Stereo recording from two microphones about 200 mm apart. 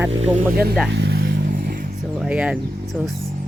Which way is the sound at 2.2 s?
5° right (ahead or behind).